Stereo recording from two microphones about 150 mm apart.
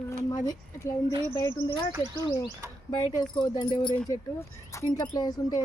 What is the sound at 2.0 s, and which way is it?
Speech, 25° right (ahead or behind).